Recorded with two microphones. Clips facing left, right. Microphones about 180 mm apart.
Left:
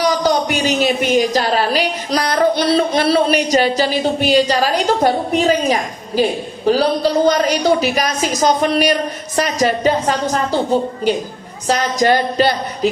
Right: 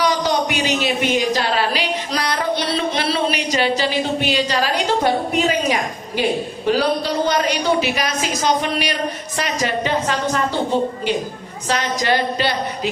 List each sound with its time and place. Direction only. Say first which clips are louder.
0.0 s a woman's voice: left 3 dB; 45° left (ahead or behind)
11.7 s speech: left 5 dB; 45° left (ahead or behind)